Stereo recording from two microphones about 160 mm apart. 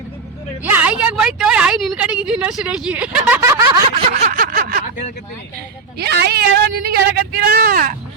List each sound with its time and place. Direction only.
0.6 s a woman's voice: 10° right (ahead or behind)
4.3 s a sound: 60° right (ahead or behind)
6.0 s a woman's voice: 90° right; by 7.9 s 60° right (ahead or behind)